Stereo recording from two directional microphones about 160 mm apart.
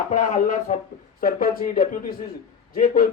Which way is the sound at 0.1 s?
55° left (ahead or behind).